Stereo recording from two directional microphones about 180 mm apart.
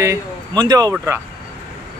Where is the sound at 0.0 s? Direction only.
20° right (ahead or behind).